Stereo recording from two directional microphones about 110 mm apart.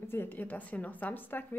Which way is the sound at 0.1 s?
20° left (ahead or behind).